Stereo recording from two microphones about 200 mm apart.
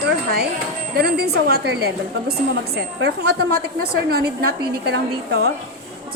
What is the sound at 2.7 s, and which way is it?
Speech, 70° right (ahead or behind).